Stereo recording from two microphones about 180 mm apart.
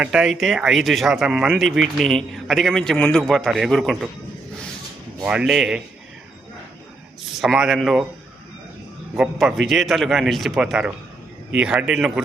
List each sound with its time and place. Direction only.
0.0 s speech: 5° right (ahead or behind)
5.2 s speech: 5° right (ahead or behind)
7.3 s speech: centre (ahead or behind)
9.1 s speech: 5° right (ahead or behind)